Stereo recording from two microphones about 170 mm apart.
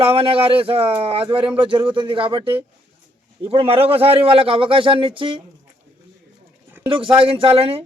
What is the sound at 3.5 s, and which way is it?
A man's voice, 35° right (ahead or behind).